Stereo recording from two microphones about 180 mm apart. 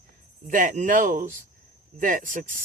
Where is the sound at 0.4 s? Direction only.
45° right (ahead or behind).